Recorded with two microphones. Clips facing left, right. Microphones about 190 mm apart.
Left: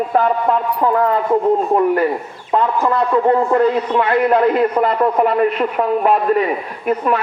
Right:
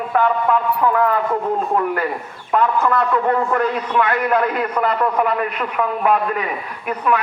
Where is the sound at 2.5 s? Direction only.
25° left (ahead or behind).